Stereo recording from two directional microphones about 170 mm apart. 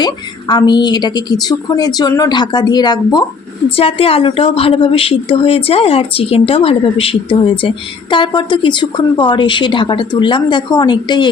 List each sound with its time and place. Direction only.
0.0 s a woman's voice: 25° left (ahead or behind)
3.8 s a woman's voice: 35° left (ahead or behind)